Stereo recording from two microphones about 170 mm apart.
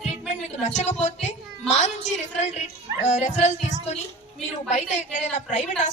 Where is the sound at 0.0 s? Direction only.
40° left (ahead or behind).